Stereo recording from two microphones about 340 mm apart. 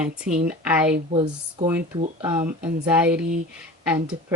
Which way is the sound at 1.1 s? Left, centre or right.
Centre.